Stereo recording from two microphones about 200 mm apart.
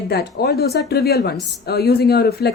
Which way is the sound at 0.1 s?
55° left (ahead or behind).